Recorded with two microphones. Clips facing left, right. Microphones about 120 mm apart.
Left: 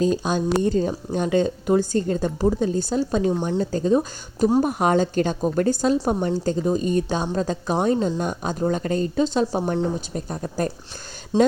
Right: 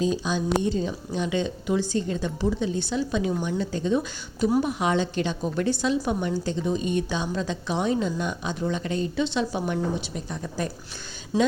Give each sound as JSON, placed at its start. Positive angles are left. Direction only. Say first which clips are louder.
{"t": 0.0, "sound": "speech", "louder": "left 4 dB", "side_deg": 50}
{"t": 10.1, "sound": "speech", "louder": "left 4 dB", "side_deg": 45}